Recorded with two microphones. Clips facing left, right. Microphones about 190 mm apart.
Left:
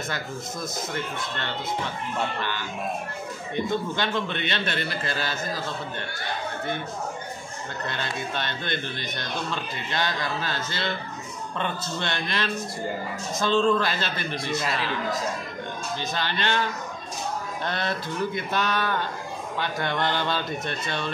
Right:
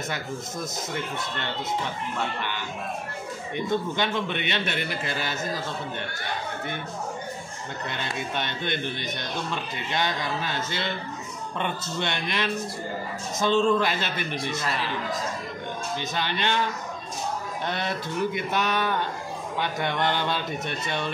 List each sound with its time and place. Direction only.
3.5 s a man's voice: 15° right (ahead or behind)
8.0 s a man's voice: 15° right (ahead or behind)
13.5 s a man's voice: 15° right (ahead or behind)
16.1 s a man's voice: 15° right (ahead or behind)
17.6 s a man's voice: 15° right (ahead or behind)